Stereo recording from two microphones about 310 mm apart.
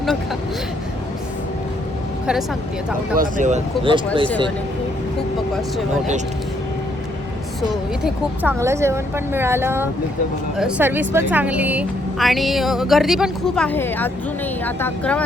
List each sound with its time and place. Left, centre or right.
3.2 s speech: right
8.0 s speech: centre